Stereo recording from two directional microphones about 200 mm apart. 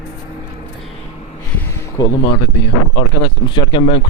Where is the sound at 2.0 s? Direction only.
20° left (ahead or behind).